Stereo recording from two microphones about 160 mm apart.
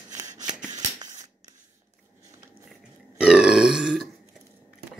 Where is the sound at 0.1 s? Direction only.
20° right (ahead or behind).